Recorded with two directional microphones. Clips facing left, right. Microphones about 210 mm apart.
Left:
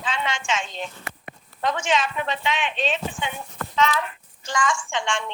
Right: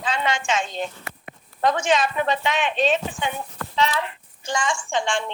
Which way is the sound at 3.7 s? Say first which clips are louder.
Even; 30° right (ahead or behind).